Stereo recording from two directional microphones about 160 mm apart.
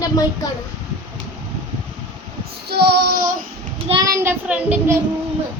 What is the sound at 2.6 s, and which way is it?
Child singing, 85° right.